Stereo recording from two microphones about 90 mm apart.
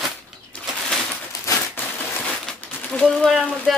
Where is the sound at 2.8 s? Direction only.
5° left (ahead or behind).